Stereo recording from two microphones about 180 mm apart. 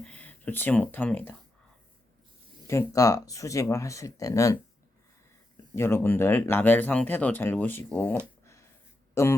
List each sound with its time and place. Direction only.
0.0 s speech: 10° left (ahead or behind)
2.6 s speech: 15° left (ahead or behind)
5.7 s speech: 15° left (ahead or behind)